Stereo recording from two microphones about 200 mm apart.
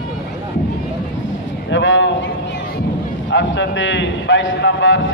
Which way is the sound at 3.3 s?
65° left (ahead or behind).